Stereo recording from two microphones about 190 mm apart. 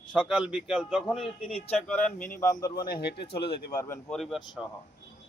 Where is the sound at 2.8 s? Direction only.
55° left (ahead or behind).